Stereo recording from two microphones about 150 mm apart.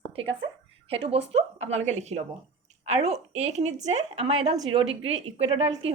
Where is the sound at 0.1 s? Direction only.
40° right (ahead or behind).